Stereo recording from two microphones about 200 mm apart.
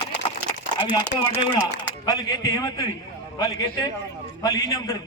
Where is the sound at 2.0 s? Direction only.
20° left (ahead or behind).